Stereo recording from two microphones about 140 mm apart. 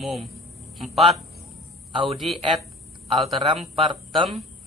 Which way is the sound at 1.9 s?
40° right (ahead or behind).